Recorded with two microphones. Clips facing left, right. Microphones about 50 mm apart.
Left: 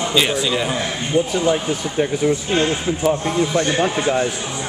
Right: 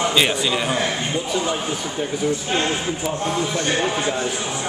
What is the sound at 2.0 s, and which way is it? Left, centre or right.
Speech, left.